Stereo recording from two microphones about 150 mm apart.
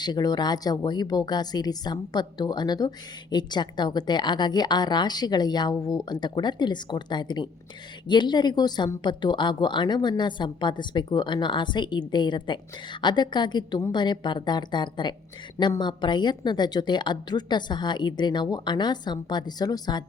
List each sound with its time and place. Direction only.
0.0 s speech: 25° left (ahead or behind)